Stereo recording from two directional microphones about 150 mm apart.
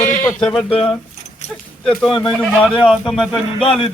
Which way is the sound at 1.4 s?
50° left (ahead or behind).